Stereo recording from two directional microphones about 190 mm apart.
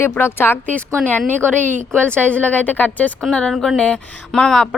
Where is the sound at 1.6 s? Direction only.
40° right (ahead or behind).